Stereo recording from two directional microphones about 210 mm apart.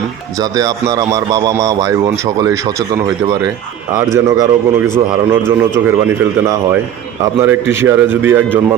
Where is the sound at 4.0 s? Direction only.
15° right (ahead or behind).